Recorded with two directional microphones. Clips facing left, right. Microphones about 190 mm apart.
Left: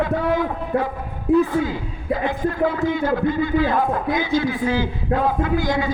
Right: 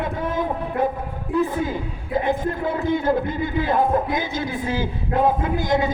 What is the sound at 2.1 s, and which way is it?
A man's voice, 20° right (ahead or behind).